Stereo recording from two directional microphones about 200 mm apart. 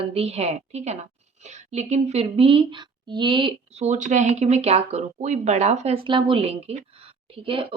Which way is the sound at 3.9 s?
40° right (ahead or behind).